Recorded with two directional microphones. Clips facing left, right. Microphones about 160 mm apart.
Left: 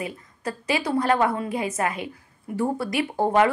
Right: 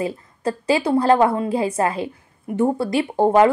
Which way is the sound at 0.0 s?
30° right (ahead or behind).